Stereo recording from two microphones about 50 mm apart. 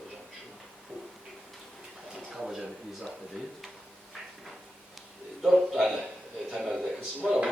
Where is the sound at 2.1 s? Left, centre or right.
Centre.